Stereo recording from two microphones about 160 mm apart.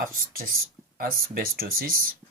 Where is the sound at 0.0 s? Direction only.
60° right (ahead or behind).